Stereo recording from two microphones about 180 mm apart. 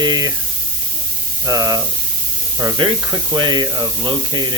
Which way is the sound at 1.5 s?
20° right (ahead or behind).